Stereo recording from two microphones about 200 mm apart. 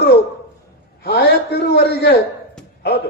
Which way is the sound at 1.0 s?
55° left (ahead or behind).